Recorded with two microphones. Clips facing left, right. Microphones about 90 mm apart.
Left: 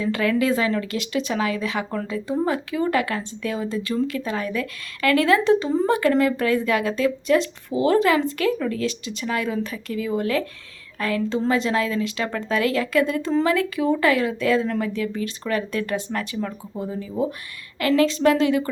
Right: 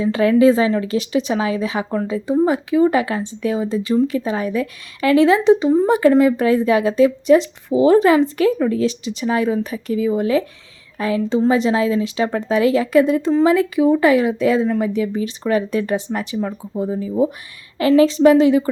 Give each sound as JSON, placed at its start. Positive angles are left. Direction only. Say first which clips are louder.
{"t": 0.0, "sound": "speech", "louder": "right 8 dB", "side_deg": -25}